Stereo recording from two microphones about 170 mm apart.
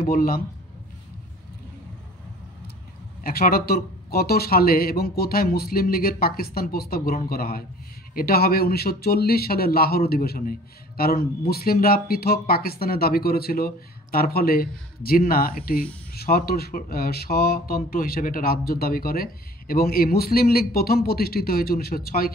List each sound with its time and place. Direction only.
0.0 s speech: 60° left (ahead or behind)
3.3 s speech: 60° left (ahead or behind)